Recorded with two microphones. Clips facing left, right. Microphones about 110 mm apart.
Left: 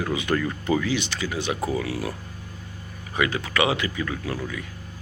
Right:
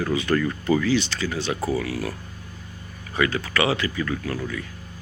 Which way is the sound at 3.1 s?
15° left (ahead or behind).